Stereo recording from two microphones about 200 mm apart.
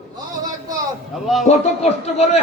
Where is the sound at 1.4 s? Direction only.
30° left (ahead or behind).